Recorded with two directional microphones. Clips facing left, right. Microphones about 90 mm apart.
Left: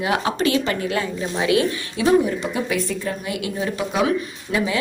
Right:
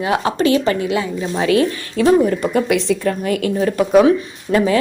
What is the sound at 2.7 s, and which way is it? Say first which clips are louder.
Speech: right 7 dB; 90° right.